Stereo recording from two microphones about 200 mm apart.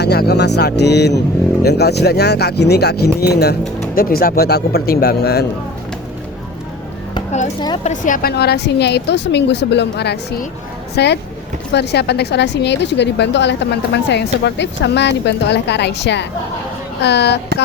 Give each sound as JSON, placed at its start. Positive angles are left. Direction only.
{"t": 0.0, "sound": "a woman's voice", "side_deg": 55}
{"t": 7.9, "sound": "a woman's voice", "side_deg": 40}